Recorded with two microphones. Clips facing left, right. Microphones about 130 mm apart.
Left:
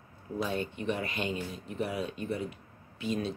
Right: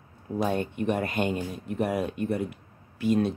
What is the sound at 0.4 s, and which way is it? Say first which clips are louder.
Speech: right 6 dB; 50° right (ahead or behind).